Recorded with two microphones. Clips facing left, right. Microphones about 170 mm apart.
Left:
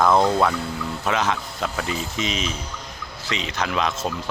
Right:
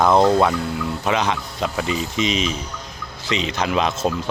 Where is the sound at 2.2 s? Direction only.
90° right.